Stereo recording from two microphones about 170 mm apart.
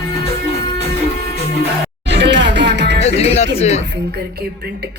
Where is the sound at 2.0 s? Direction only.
90° right.